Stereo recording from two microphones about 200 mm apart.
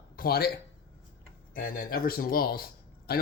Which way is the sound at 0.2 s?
50° left (ahead or behind).